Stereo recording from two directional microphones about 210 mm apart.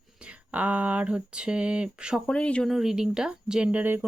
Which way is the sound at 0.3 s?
5° right (ahead or behind).